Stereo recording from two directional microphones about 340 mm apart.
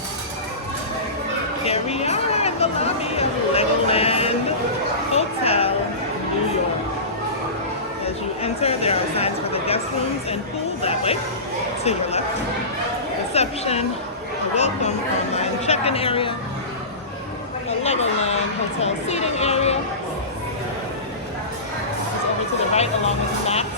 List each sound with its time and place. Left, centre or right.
1.6 s a sound: centre
8.4 s speech: centre
10.8 s speech: centre
13.3 s speech: centre
17.8 s a sound: centre
18.8 s speech: centre
22.7 s speech: centre